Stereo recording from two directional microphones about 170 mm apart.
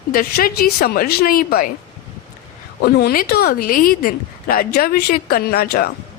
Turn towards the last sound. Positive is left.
turn(degrees=65)  # may be behind; listen again after turning